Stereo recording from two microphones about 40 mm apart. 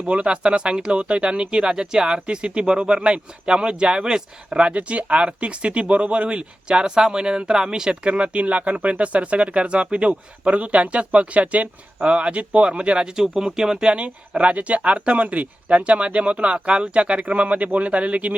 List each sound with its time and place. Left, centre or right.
0.1 s speech: right
13.9 s speech: right